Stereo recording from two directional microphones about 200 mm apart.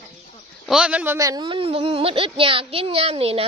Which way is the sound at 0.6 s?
5° right (ahead or behind).